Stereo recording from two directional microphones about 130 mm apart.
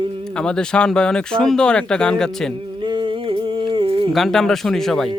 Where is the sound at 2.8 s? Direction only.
40° right (ahead or behind).